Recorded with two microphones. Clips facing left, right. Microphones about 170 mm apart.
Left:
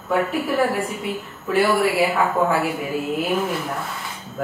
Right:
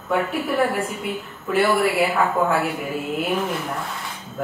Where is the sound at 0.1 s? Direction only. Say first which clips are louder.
Left 1 dB; centre (ahead or behind).